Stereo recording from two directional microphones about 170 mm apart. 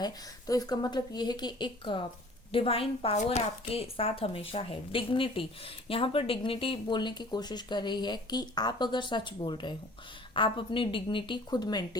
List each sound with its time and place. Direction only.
0.0 s a woman's voice: 20° left (ahead or behind)